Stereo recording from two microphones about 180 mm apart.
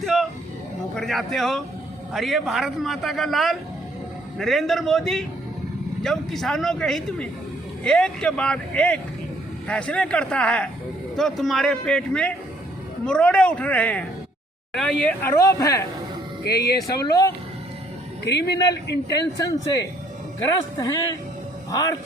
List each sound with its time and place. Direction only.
0.0 s a sound: centre (ahead or behind)
0.9 s a man's voice: centre (ahead or behind)
16.4 s speech: 60° left (ahead or behind)
17.0 s speech: 20° left (ahead or behind)
18.3 s a man's voice: 70° left (ahead or behind)
20.4 s speech: 20° left (ahead or behind)